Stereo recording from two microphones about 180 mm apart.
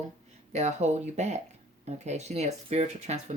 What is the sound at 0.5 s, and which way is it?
Speech, 40° right (ahead or behind).